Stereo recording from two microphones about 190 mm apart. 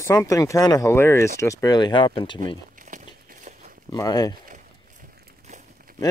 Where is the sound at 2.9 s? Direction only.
40° right (ahead or behind).